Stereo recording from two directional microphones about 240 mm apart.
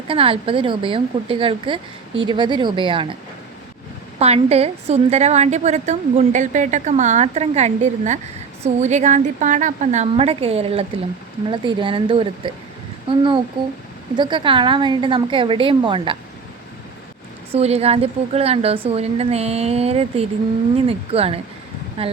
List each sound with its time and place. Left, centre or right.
0.1 s a woman's voice: right
4.2 s a woman's voice: right
17.5 s a woman's voice: right